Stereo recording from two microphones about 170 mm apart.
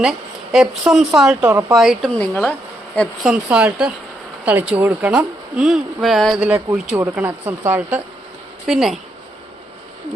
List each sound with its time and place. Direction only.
0.0 s speech: centre (ahead or behind)
1.5 s speech: 15° right (ahead or behind)
1.7 s speech: centre (ahead or behind)
6.9 s speech: 15° right (ahead or behind)
8.6 s speech: centre (ahead or behind)